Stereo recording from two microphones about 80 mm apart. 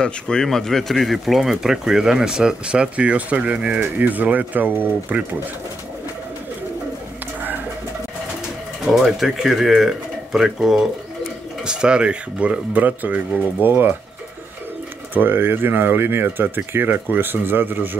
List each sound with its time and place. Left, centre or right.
0.0 s speech: centre; by 5.2 s right
8.8 s speech: centre; by 13.9 s right
15.1 s speech: right